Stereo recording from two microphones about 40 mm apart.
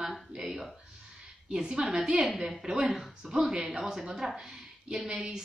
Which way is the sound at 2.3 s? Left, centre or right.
Centre.